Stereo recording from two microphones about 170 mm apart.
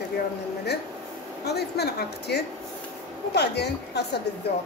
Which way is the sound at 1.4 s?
75° left (ahead or behind).